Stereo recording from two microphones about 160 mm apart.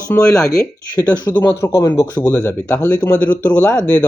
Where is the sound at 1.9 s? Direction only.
10° left (ahead or behind).